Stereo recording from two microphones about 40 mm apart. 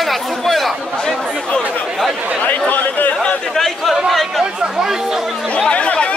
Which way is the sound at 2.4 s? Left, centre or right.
Left.